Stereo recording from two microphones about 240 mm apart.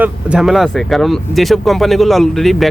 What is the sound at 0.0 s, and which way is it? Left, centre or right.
Speech, centre.